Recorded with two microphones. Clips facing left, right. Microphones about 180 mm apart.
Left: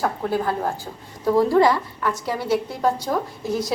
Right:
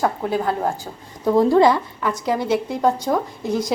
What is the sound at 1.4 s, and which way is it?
A woman's voice, 20° right (ahead or behind).